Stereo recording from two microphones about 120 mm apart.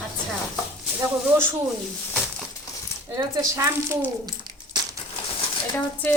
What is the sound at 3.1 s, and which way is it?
Speech, 25° right (ahead or behind).